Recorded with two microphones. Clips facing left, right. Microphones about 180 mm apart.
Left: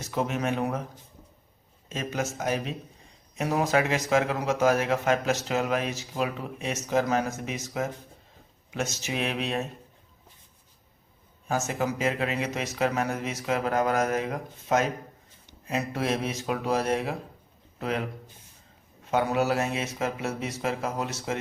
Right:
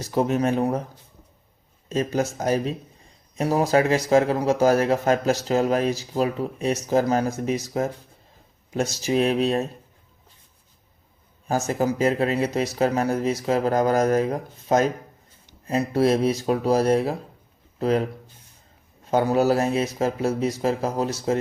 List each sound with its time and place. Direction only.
0.0 s speech: 35° right (ahead or behind)
1.9 s speech: 35° right (ahead or behind)
11.4 s speech: 35° right (ahead or behind)
19.1 s speech: 35° right (ahead or behind)